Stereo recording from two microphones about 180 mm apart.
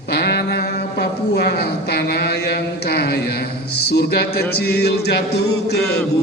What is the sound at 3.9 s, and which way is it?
Music, 65° left (ahead or behind).